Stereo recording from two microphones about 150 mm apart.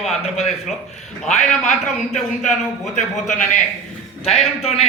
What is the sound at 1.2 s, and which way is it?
Speech, 50° left (ahead or behind).